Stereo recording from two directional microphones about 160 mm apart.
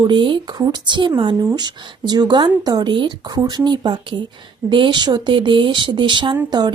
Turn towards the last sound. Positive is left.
turn(degrees=-25)  # may be behind; listen again after turning